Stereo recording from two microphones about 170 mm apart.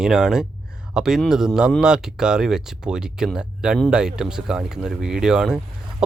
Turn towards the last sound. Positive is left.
turn(degrees=-5)  # may be behind; listen again after turning